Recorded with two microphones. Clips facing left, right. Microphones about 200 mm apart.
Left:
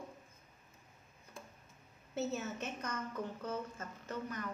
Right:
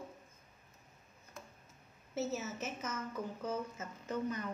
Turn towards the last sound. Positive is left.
turn(degrees=-15)  # may be behind; listen again after turning